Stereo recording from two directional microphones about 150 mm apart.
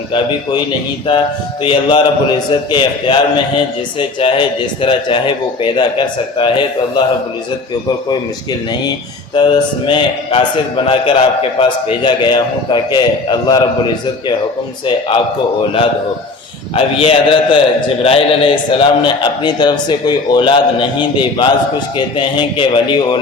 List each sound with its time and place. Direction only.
1.6 s a man's voice: 35° left (ahead or behind)
9.3 s a man's voice: 30° left (ahead or behind)
16.7 s a man's voice: 40° left (ahead or behind)